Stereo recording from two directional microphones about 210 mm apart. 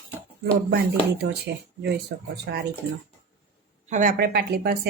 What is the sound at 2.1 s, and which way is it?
Speech, 55° right (ahead or behind).